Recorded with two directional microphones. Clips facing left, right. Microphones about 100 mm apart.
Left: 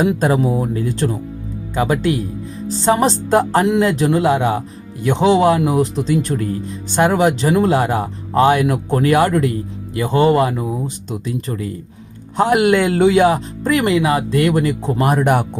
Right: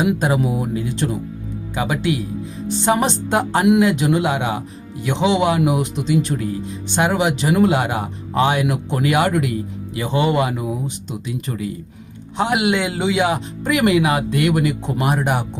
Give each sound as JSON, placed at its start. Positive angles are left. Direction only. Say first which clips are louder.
{"t": 0.0, "sound": "a man's voice", "louder": "left 3 dB", "side_deg": 40}